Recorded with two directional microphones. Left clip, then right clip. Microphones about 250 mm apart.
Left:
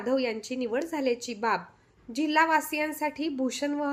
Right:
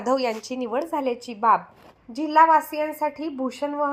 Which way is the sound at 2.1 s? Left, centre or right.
Left.